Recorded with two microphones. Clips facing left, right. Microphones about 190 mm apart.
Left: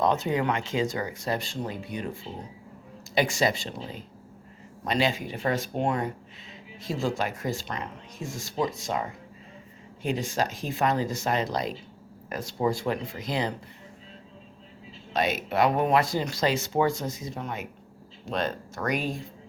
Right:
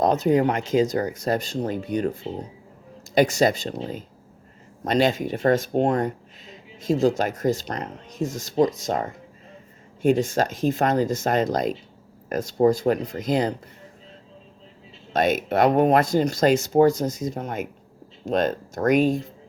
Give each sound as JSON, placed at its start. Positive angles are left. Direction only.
{"t": 0.0, "sound": "speech", "side_deg": -40}
{"t": 3.2, "sound": "speech", "side_deg": -45}
{"t": 4.8, "sound": "speech", "side_deg": -45}
{"t": 15.1, "sound": "speech", "side_deg": -45}